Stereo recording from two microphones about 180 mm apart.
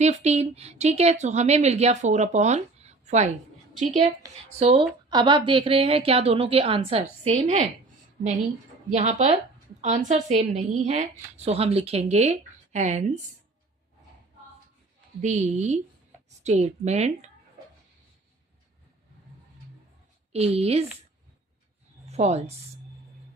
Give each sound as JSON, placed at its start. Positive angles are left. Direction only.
{"t": 0.0, "sound": "speech", "side_deg": -40}
{"t": 4.6, "sound": "speech", "side_deg": -30}
{"t": 8.9, "sound": "speech", "side_deg": -40}
{"t": 15.2, "sound": "speech", "side_deg": -40}
{"t": 20.3, "sound": "speech", "side_deg": -35}
{"t": 22.1, "sound": "a woman's voice", "side_deg": -35}